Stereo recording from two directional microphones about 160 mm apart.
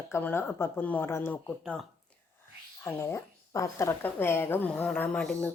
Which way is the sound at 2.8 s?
15° left (ahead or behind).